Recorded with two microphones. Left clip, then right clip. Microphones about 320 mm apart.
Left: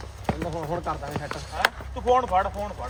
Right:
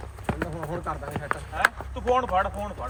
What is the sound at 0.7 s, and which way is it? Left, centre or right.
Speech, centre.